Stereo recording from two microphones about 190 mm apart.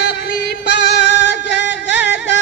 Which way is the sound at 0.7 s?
65° left (ahead or behind).